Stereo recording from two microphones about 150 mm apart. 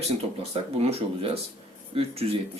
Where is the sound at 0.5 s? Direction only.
45° right (ahead or behind).